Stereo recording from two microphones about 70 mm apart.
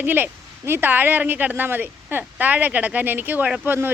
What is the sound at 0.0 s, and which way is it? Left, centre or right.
Speech, right.